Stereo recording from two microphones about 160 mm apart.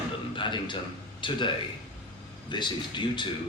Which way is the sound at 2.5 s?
30° left (ahead or behind).